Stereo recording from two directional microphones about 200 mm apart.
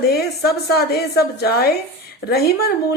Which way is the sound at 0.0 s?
50° left (ahead or behind).